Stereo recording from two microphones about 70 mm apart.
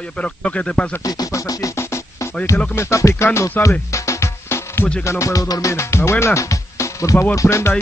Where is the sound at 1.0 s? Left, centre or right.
Left.